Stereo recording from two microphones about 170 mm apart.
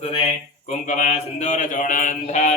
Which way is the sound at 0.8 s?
45° left (ahead or behind).